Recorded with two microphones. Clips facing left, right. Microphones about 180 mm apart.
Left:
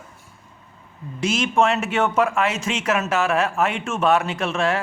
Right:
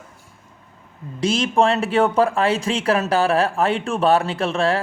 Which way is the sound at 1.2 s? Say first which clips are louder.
Right 2 dB; 30° right (ahead or behind).